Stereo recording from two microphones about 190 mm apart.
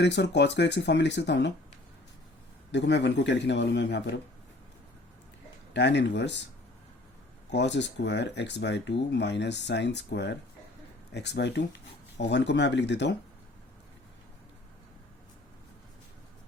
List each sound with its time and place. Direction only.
0.0 s speech: 65° left (ahead or behind)
2.7 s a man's voice: 65° left (ahead or behind)
5.7 s speech: 65° left (ahead or behind)
7.5 s speech: 65° left (ahead or behind)